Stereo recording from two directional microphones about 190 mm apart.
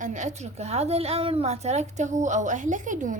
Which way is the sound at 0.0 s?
40° right (ahead or behind).